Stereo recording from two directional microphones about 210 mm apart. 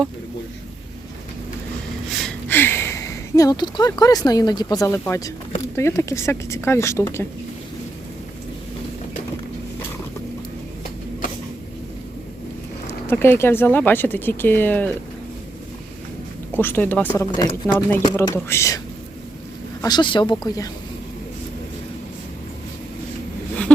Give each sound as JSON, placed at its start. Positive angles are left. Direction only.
{"t": 2.5, "sound": "speech", "side_deg": 10}
{"t": 12.9, "sound": "speech", "side_deg": 10}
{"t": 16.6, "sound": "speech", "side_deg": 10}
{"t": 19.8, "sound": "speech", "side_deg": 20}